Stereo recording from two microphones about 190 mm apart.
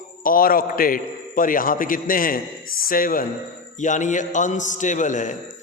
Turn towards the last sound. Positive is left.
turn(degrees=40)  # may be behind; listen again after turning